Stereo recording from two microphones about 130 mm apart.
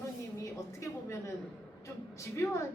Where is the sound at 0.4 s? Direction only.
20° left (ahead or behind).